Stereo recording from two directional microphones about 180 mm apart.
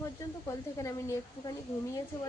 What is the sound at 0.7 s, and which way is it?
Speech, 20° left (ahead or behind).